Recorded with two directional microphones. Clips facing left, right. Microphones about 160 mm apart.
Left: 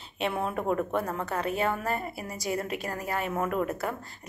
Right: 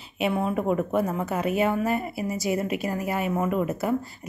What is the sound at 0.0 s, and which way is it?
A woman's voice, 5° right (ahead or behind).